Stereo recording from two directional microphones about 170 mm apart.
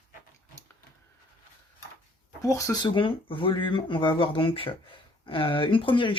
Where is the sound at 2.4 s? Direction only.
20° left (ahead or behind).